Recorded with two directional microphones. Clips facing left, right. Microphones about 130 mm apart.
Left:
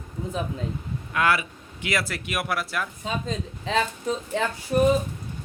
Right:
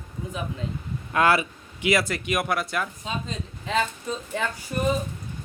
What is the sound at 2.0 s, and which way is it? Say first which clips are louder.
Speech: right 3 dB; centre (ahead or behind).